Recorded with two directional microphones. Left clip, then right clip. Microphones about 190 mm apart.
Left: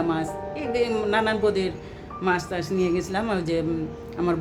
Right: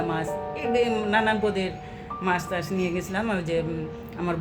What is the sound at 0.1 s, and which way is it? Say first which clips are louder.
Speech: left 1 dB; 25° left (ahead or behind).